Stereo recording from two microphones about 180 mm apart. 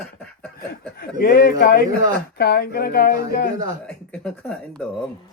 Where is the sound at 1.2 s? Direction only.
55° left (ahead or behind).